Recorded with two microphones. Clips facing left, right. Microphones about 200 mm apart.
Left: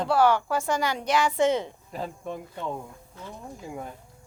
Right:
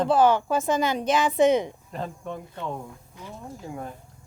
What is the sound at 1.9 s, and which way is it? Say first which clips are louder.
Speech: left 1 dB; 10° left (ahead or behind).